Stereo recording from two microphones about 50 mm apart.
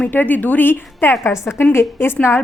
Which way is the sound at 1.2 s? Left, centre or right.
Left.